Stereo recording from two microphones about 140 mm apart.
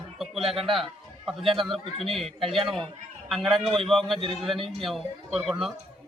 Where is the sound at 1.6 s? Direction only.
Centre (ahead or behind).